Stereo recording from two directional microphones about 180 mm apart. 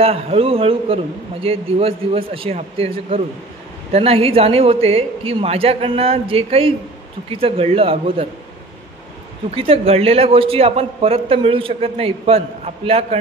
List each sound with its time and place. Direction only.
0.0 s a man's voice: 35° right (ahead or behind)
9.6 s a man's voice: 35° right (ahead or behind)